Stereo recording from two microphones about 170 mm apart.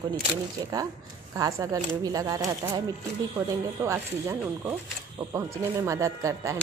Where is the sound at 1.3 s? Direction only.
20° right (ahead or behind).